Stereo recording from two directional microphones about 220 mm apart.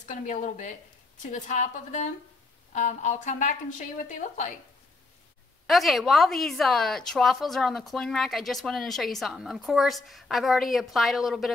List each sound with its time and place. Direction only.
0.0 s a woman's voice: 35° left (ahead or behind)
5.7 s a woman's voice: centre (ahead or behind)